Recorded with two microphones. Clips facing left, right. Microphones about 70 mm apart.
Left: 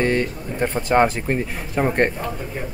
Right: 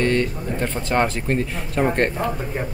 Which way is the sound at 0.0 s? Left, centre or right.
Centre.